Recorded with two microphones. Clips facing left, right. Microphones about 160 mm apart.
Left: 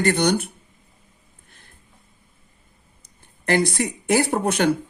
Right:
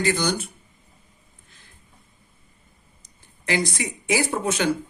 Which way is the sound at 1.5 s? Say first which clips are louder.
Left 2 dB; 55° left (ahead or behind).